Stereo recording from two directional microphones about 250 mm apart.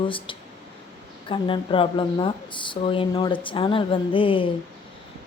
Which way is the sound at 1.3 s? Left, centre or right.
Left.